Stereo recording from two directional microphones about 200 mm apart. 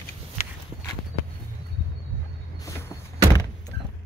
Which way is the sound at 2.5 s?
15° left (ahead or behind).